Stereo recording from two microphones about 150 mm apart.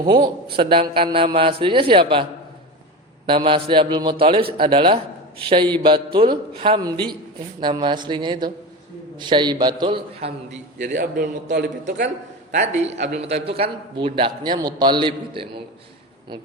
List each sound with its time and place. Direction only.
0.5 s a man's voice: 35° right (ahead or behind)
3.2 s a man's voice: 35° right (ahead or behind); by 11.0 s 55° right (ahead or behind)
11.0 s a man's voice: 80° right
12.5 s a man's voice: 50° right (ahead or behind); by 15.6 s 35° right (ahead or behind)